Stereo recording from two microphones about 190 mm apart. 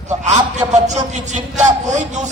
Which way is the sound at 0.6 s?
20° right (ahead or behind).